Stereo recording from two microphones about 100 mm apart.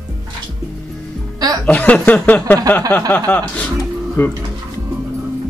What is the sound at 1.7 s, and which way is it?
Speech, 15° left (ahead or behind).